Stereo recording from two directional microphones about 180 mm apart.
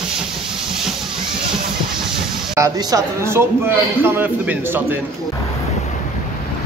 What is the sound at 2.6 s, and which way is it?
A man's voice, 20° right (ahead or behind).